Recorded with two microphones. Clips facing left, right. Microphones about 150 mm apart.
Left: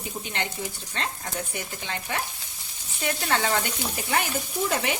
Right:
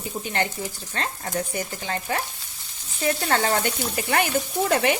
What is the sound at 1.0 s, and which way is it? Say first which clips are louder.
Speech: right 4 dB; 40° right (ahead or behind).